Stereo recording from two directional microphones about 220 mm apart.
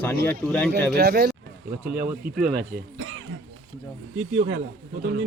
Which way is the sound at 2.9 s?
60° right (ahead or behind).